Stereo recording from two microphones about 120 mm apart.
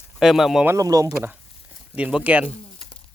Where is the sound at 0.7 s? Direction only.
30° right (ahead or behind).